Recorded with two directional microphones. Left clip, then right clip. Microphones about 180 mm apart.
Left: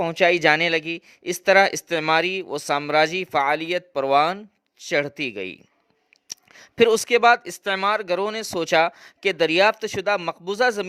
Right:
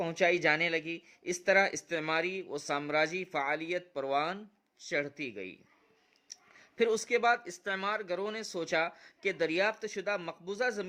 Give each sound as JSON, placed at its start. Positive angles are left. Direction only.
{"t": 0.0, "sound": "speech", "side_deg": 50}